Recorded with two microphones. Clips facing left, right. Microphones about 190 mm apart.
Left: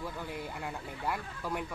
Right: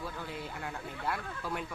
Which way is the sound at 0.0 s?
15° left (ahead or behind).